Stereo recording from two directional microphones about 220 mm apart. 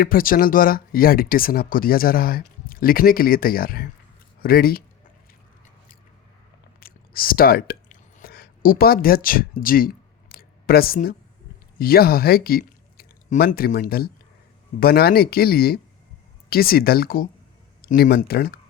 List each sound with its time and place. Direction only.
0.0 s speech: 40° left (ahead or behind)
6.7 s a sound: 40° left (ahead or behind)
11.8 s speech: 45° left (ahead or behind)